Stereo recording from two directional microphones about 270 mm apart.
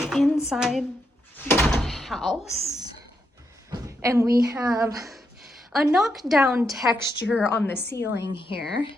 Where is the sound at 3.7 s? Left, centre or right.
Centre.